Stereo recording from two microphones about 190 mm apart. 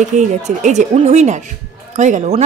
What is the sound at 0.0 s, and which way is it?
A woman's voice, 40° right (ahead or behind).